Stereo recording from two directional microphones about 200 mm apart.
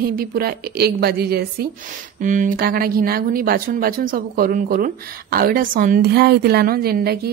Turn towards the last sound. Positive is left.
turn(degrees=-50)  # may be behind; listen again after turning